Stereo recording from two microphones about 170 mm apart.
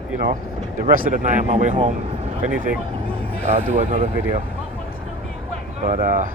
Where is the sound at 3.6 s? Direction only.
50° right (ahead or behind).